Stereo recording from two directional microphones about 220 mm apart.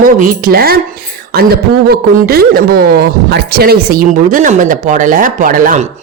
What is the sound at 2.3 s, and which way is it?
Speech, 45° right (ahead or behind).